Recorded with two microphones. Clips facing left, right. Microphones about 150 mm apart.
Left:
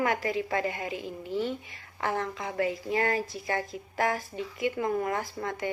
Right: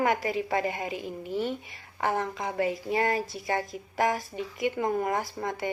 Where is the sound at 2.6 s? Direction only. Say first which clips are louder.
Right 1 dB; 20° right (ahead or behind).